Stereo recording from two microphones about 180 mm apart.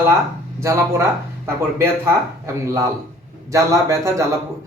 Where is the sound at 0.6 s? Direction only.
15° right (ahead or behind).